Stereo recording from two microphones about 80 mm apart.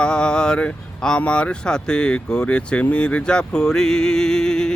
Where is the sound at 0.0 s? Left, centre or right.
Centre.